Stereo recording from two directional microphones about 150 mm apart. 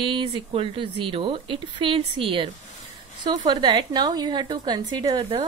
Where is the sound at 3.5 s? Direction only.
30° right (ahead or behind).